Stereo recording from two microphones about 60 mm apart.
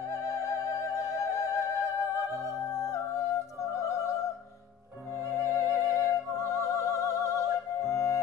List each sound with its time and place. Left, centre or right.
0.4 s music: right
0.8 s music: left
1.6 s music: right
2.7 s music: left
5.3 s music: right
5.9 s music: left
6.4 s music: right
7.8 s music: left